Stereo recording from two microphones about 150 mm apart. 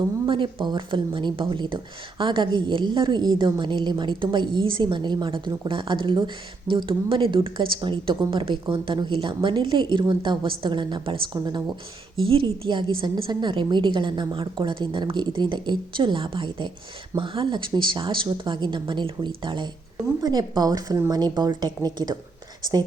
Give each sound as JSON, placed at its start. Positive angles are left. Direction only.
{"t": 0.3, "sound": "a woman's voice", "side_deg": -35}